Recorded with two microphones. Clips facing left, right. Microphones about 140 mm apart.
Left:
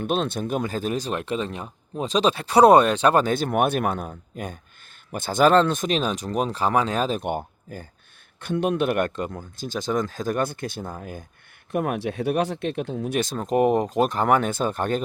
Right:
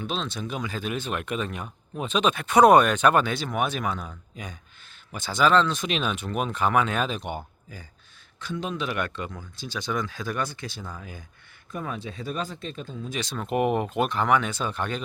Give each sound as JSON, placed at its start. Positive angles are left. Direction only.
{"t": 0.0, "sound": "speech", "side_deg": 55}
{"t": 3.3, "sound": "speech", "side_deg": 50}
{"t": 7.2, "sound": "speech", "side_deg": 50}
{"t": 11.7, "sound": "speech", "side_deg": 65}